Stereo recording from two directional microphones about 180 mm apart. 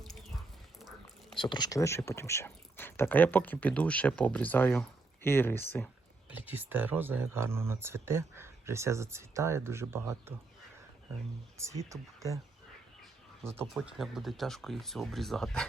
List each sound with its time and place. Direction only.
0.0 s a sound: centre (ahead or behind)
1.4 s speech: 25° left (ahead or behind)
6.3 s speech: 10° right (ahead or behind)
11.5 s speech: 15° right (ahead or behind)
13.4 s speech: 15° right (ahead or behind)
13.7 s speech: centre (ahead or behind)